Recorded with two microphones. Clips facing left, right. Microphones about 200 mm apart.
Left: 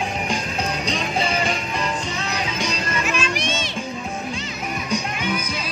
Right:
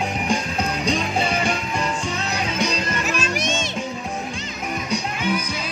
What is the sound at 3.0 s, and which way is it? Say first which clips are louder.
Music: even; 40° right (ahead or behind).